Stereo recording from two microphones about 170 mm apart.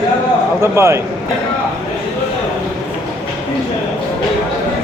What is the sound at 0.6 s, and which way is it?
Speech, 15° right (ahead or behind).